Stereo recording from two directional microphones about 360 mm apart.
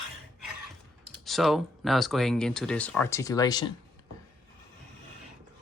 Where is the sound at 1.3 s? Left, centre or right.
Centre.